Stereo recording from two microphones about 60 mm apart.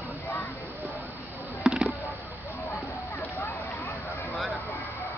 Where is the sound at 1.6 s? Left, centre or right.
Right.